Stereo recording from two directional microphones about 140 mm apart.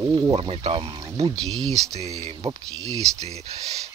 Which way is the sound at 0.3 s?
45° right (ahead or behind).